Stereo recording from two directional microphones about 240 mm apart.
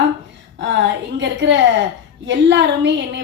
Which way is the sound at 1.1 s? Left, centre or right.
Right.